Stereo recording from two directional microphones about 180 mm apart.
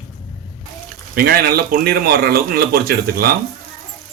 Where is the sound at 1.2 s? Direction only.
60° right (ahead or behind).